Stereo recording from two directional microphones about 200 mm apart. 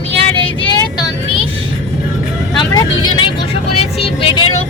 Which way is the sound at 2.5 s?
20° left (ahead or behind).